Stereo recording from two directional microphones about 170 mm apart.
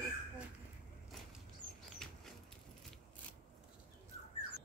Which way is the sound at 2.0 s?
5° left (ahead or behind).